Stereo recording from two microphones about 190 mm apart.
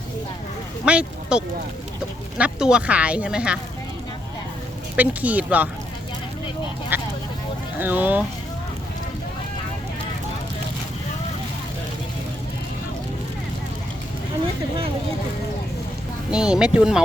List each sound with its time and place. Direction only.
0.9 s speech: 5° right (ahead or behind)
4.9 s speech: 10° right (ahead or behind)
6.9 s speech: 10° right (ahead or behind)
16.3 s speech: 5° right (ahead or behind)